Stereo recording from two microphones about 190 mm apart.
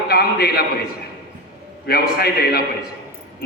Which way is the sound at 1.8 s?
55° left (ahead or behind).